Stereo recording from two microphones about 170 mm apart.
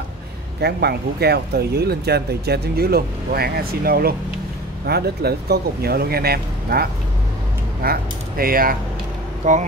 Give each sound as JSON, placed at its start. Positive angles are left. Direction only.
{"t": 0.6, "sound": "speech", "side_deg": -70}
{"t": 9.4, "sound": "speech", "side_deg": -45}